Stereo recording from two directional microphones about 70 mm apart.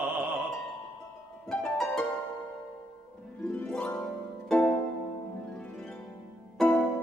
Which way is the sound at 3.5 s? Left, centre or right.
Left.